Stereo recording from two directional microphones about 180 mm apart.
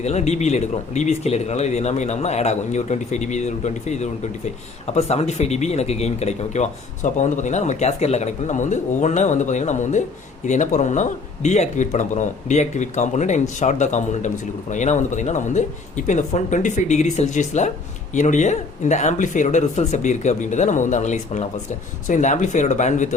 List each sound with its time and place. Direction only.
0.0 s speech: 40° left (ahead or behind)